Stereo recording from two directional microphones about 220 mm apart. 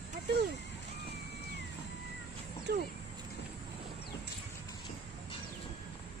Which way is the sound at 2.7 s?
45° right (ahead or behind).